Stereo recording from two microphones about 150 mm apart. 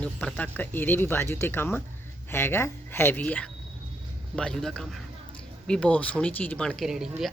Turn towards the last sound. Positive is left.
turn(degrees=0)  # may be behind; listen again after turning